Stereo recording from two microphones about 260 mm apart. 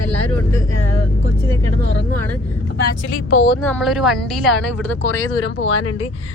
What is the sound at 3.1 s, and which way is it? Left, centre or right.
Speech, left.